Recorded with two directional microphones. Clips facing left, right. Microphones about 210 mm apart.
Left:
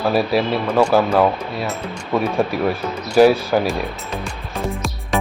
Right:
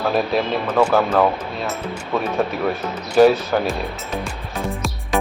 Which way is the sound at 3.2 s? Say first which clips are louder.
Left 1 dB; 5° left (ahead or behind).